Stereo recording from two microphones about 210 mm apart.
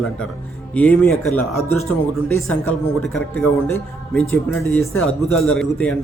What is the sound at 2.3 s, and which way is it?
Speech, 80° left.